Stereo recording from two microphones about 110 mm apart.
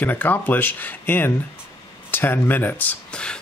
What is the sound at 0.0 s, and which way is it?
Speech, 15° left (ahead or behind).